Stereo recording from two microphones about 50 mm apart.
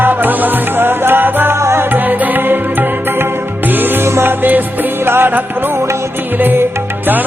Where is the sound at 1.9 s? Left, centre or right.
Right.